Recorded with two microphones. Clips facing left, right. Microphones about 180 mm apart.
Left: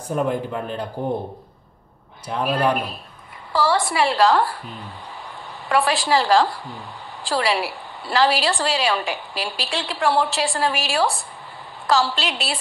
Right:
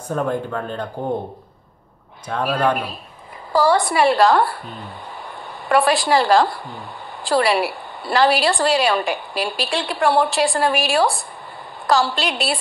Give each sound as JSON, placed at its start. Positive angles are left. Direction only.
{"t": 0.1, "sound": "speech", "side_deg": 15}
{"t": 2.2, "sound": "speech", "side_deg": 10}
{"t": 3.5, "sound": "a woman's voice", "side_deg": -55}
{"t": 5.7, "sound": "a woman's voice", "side_deg": -55}